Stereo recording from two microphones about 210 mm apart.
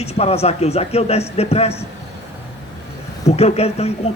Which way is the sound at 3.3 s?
30° left (ahead or behind).